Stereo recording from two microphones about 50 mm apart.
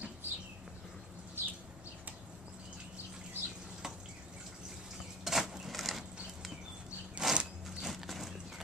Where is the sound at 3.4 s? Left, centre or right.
Right.